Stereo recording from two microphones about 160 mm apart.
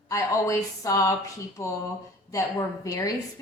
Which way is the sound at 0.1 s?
20° left (ahead or behind).